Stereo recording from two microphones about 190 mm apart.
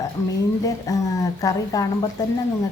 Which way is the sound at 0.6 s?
20° left (ahead or behind).